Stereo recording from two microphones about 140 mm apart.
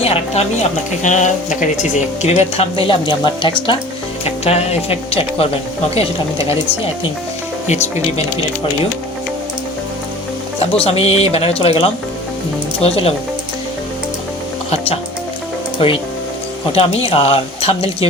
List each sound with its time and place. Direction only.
0.0 s speech: 45° left (ahead or behind)
7.7 s speech: 55° left (ahead or behind)
10.8 s speech: 45° left (ahead or behind)
15.8 s speech: 40° left (ahead or behind)